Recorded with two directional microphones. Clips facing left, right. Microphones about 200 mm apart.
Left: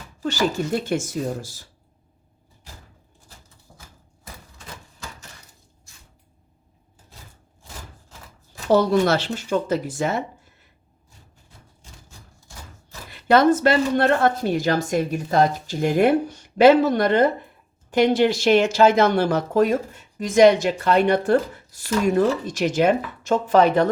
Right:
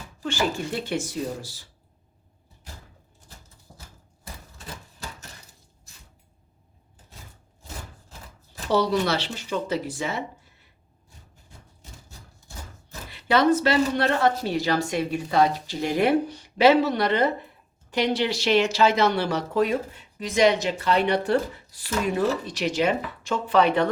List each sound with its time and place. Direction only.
0.2 s speech: 40° left (ahead or behind)
8.7 s speech: 50° left (ahead or behind)
13.1 s speech: 50° left (ahead or behind)